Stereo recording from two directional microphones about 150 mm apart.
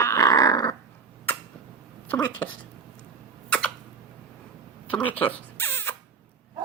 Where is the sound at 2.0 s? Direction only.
10° left (ahead or behind).